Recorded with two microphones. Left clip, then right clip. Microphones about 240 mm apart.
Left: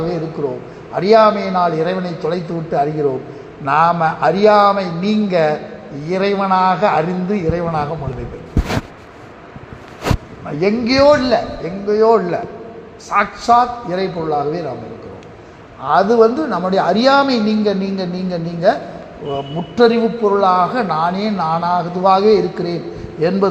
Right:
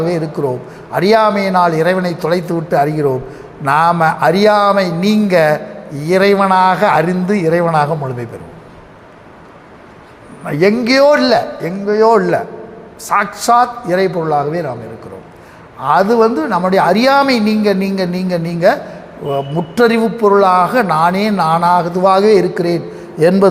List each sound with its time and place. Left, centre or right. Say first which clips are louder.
0.0 s speech: right 4 dB; right
10.4 s speech: right 5 dB; right
15.8 s speech: right 1 dB; right